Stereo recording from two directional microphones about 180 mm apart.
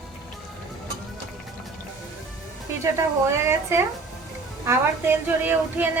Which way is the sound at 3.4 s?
15° right (ahead or behind).